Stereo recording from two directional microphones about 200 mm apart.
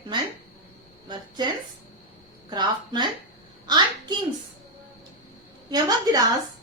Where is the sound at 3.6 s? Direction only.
20° right (ahead or behind).